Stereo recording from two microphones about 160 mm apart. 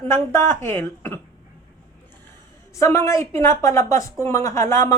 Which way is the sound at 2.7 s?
20° left (ahead or behind).